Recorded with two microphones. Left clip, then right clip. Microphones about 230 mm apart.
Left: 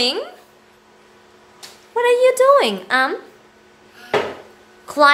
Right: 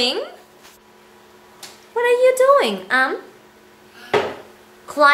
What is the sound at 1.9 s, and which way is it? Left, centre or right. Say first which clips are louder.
A woman's voice: left 1 dB; centre.